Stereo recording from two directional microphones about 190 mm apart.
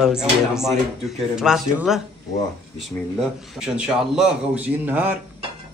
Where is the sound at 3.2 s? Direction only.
5° right (ahead or behind).